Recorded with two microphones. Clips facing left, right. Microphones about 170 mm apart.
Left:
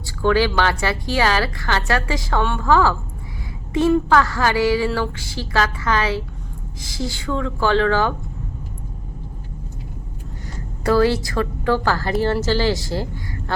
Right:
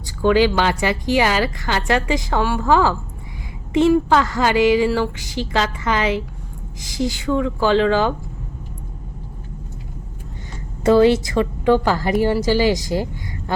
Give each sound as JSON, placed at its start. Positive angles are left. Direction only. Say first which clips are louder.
{"t": 0.0, "sound": "a woman's voice", "louder": "right 3 dB", "side_deg": -15}
{"t": 10.8, "sound": "speech", "louder": "right 4 dB", "side_deg": -20}